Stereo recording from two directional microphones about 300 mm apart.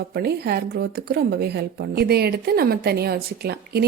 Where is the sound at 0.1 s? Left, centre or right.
Right.